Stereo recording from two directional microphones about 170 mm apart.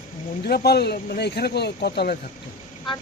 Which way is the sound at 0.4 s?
70° left (ahead or behind).